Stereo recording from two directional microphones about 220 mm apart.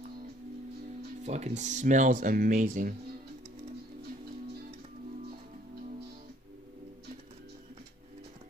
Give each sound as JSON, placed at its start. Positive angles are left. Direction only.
{"t": 1.2, "sound": "speech", "side_deg": -30}